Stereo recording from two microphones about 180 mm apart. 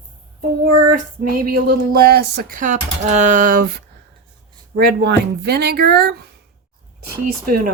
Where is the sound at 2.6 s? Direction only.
40° right (ahead or behind).